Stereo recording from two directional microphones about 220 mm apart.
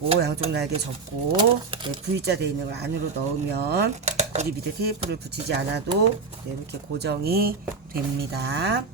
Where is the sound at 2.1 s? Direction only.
50° right (ahead or behind).